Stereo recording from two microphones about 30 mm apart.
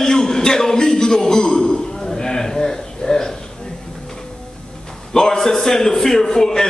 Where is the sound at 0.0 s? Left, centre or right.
Left.